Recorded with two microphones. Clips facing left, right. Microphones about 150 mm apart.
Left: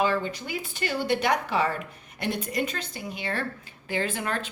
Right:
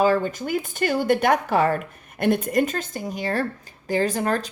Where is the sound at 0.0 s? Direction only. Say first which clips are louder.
Right 6 dB; 45° right (ahead or behind).